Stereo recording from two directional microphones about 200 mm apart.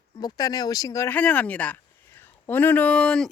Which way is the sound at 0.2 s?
20° left (ahead or behind).